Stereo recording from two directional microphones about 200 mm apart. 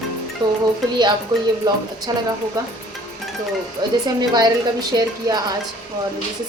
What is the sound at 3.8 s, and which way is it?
A woman's voice, 20° right (ahead or behind).